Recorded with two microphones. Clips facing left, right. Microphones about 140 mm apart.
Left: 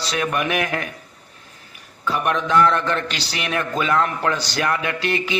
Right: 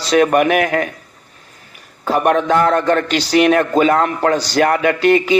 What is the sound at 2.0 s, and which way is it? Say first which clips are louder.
A man's voice: right 7 dB; 45° right (ahead or behind).